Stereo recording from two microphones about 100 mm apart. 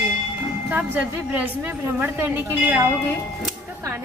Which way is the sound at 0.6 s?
15° right (ahead or behind).